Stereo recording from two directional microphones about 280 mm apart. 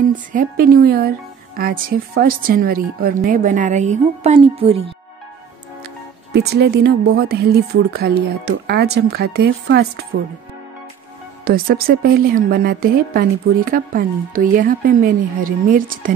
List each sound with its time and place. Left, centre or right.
0.1 s a woman's voice: right
6.3 s a woman's voice: right
11.4 s a woman's voice: right